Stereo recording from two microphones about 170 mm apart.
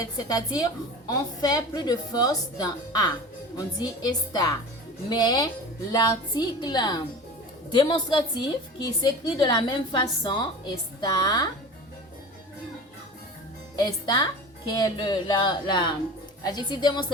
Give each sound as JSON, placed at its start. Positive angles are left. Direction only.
{"t": 0.0, "sound": "a woman's voice", "side_deg": 20}
{"t": 13.7, "sound": "a woman's voice", "side_deg": 25}